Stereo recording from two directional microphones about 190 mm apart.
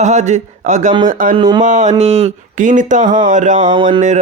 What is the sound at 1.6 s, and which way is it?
Speech, 40° right (ahead or behind).